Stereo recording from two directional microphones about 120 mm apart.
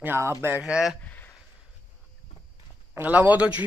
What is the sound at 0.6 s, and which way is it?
Speech, 5° right (ahead or behind).